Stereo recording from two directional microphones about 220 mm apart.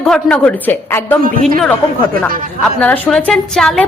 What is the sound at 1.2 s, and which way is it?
Speech, 40° right (ahead or behind).